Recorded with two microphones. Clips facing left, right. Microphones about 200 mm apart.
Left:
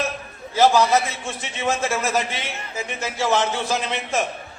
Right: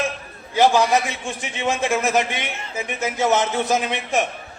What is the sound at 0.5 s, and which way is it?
Speech, 15° right (ahead or behind).